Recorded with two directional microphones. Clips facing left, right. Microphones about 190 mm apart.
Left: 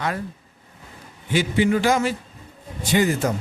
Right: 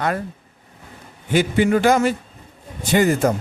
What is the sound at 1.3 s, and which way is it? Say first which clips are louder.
A man's voice: right 3 dB; 50° right (ahead or behind).